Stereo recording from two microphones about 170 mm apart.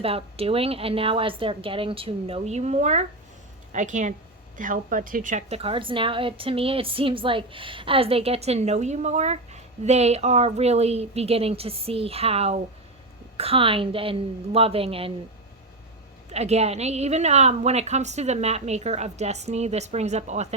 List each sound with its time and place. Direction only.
0.0 s a woman's voice: 35° right (ahead or behind)
16.3 s a woman's voice: 40° right (ahead or behind)